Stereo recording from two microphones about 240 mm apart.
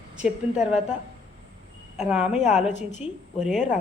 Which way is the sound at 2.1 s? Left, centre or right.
Centre.